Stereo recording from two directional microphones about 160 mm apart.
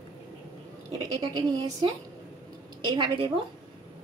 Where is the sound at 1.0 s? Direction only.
20° right (ahead or behind).